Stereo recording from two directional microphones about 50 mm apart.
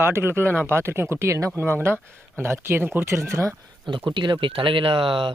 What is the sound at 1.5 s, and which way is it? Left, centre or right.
Speech, right.